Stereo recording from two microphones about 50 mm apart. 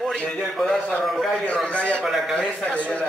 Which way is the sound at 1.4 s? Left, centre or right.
Left.